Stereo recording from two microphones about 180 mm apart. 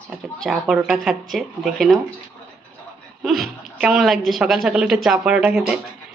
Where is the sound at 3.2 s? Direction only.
Centre (ahead or behind).